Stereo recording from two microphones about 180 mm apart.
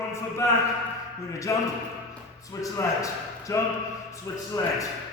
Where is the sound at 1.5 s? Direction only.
15° left (ahead or behind).